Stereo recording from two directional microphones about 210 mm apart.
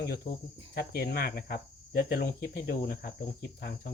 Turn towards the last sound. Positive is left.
turn(degrees=45)  # may be behind; listen again after turning